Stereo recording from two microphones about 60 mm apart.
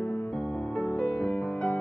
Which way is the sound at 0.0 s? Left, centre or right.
Left.